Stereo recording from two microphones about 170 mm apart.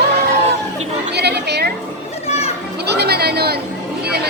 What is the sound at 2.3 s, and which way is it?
Children playing, 40° left (ahead or behind).